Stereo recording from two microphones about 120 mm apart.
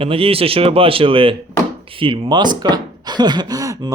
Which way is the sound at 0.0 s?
50° right (ahead or behind).